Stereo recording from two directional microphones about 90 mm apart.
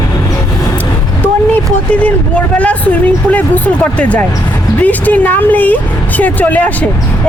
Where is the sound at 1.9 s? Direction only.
15° left (ahead or behind).